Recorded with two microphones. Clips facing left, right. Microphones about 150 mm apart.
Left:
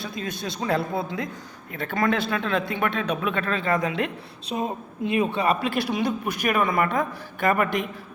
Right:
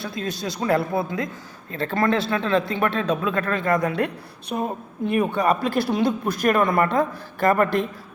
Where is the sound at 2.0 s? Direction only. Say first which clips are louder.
Right 2 dB; centre (ahead or behind).